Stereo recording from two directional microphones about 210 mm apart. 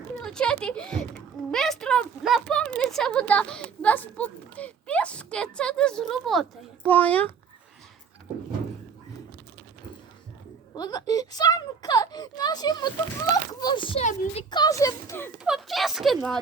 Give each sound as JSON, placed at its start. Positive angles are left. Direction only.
{"t": 0.2, "sound": "a child's voice", "side_deg": 5}
{"t": 10.8, "sound": "speech", "side_deg": 20}
{"t": 14.5, "sound": "speech", "side_deg": 15}
{"t": 15.4, "sound": "speech", "side_deg": 0}